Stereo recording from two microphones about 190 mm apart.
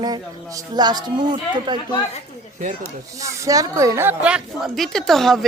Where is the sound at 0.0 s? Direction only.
20° right (ahead or behind).